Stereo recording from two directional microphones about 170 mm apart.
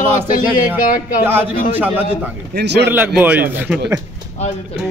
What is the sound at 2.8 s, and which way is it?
Speech, 10° right (ahead or behind).